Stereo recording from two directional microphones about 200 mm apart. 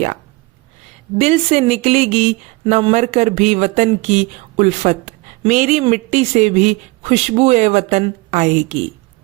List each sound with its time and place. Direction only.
1.2 s speech: 30° right (ahead or behind)